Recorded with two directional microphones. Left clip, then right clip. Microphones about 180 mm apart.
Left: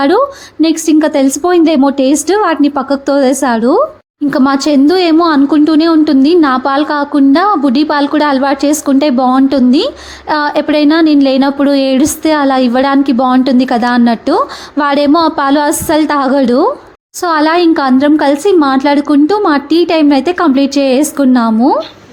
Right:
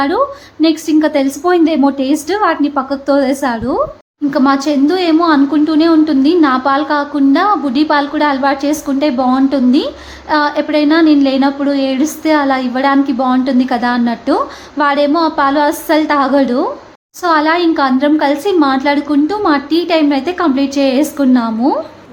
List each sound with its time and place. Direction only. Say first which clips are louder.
0.6 s a woman's voice: left 2 dB; 40° left (ahead or behind)